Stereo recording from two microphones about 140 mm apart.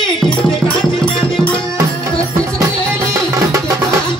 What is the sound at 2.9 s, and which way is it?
Music, 20° right (ahead or behind).